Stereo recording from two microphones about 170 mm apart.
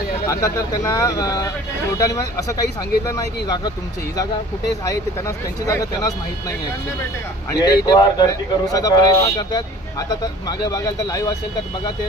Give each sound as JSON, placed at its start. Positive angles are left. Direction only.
{"t": 0.3, "sound": "speech", "side_deg": 20}
{"t": 5.6, "sound": "speech", "side_deg": 20}
{"t": 7.6, "sound": "speech", "side_deg": 25}